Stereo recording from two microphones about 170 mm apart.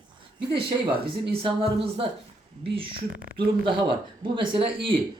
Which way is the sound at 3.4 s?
30° right (ahead or behind).